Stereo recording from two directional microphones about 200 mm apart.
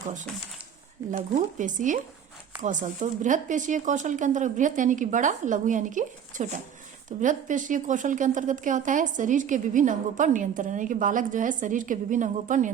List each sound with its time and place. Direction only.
1.1 s a woman's voice: 40° right (ahead or behind)